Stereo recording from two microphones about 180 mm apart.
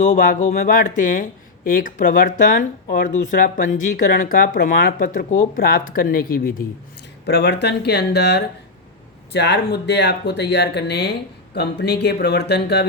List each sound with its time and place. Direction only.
0.0 s speech: 45° left (ahead or behind)
7.3 s speech: 65° left (ahead or behind)